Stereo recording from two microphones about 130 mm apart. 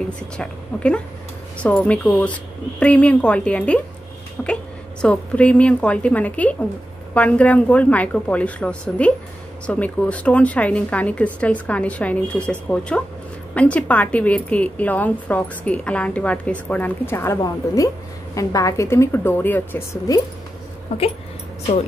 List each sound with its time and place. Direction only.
0.4 s a woman's voice: 10° left (ahead or behind)
20.9 s speech: 60° left (ahead or behind)